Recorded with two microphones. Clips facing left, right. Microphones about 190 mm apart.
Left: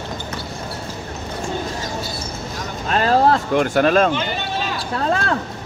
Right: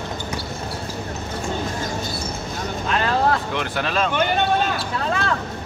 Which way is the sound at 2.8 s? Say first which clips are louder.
Left 5 dB; 40° left (ahead or behind).